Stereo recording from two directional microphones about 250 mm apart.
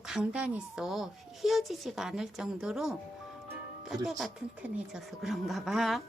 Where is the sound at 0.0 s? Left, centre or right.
Centre.